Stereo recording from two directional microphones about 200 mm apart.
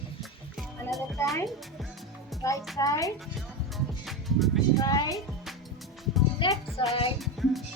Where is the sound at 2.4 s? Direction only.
15° left (ahead or behind).